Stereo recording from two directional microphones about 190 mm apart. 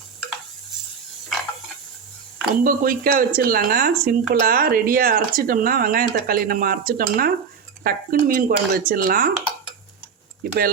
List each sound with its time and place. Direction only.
2.5 s speech: 50° right (ahead or behind)
10.4 s speech: 50° right (ahead or behind)